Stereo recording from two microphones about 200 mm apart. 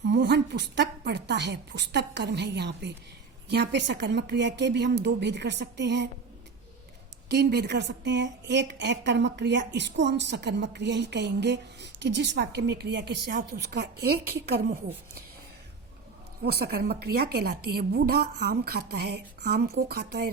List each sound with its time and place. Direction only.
0.0 s a woman's voice: 60° right (ahead or behind)
7.3 s a woman's voice: 55° right (ahead or behind)
16.4 s a woman's voice: 50° right (ahead or behind)